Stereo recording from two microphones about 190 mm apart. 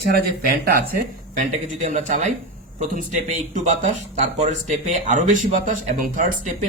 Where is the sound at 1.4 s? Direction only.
40° right (ahead or behind).